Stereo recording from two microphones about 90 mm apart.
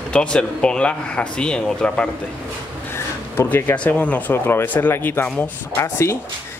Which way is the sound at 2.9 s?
25° left (ahead or behind).